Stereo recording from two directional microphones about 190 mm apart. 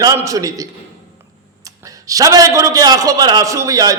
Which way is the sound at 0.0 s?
20° right (ahead or behind).